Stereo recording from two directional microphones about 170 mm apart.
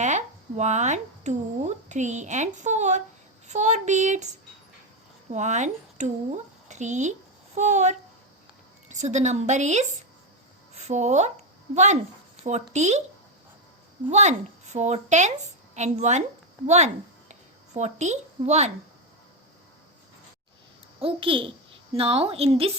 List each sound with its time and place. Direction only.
0.0 s speech: 45° right (ahead or behind)
5.3 s a woman's voice: 45° right (ahead or behind)
14.1 s speech: 45° right (ahead or behind)
21.0 s a child's voice: 30° right (ahead or behind)